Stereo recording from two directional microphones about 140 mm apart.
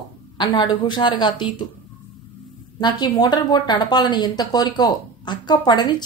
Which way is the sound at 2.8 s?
30° left (ahead or behind).